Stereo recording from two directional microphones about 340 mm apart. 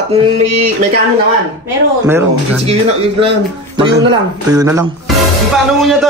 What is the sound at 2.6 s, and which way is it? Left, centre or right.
Speech, centre.